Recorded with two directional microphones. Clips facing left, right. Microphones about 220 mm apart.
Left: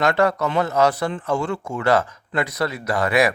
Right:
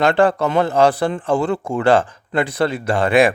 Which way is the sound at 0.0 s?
30° right (ahead or behind).